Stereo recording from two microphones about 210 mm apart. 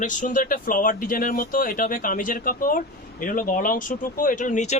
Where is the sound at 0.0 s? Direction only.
40° left (ahead or behind).